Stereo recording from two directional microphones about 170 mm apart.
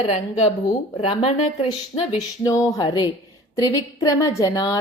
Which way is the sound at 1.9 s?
20° left (ahead or behind).